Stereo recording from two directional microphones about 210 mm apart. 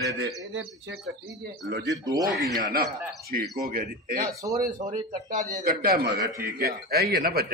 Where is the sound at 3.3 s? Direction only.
45° right (ahead or behind).